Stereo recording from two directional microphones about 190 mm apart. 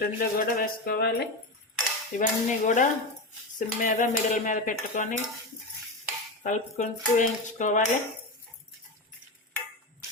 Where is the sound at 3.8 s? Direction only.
45° left (ahead or behind).